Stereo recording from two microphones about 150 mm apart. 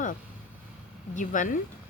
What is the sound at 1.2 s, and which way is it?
Speech, 55° left (ahead or behind).